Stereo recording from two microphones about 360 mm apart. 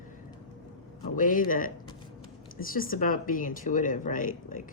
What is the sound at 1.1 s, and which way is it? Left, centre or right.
A woman's voice, left.